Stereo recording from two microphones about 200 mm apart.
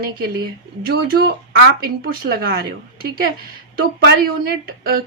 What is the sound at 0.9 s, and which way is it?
A woman's voice, 50° right (ahead or behind).